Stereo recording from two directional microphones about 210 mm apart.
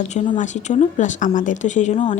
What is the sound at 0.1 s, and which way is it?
Speech, 35° left (ahead or behind).